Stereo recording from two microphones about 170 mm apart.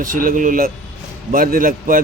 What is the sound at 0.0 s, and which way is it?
A man's voice, 55° right (ahead or behind).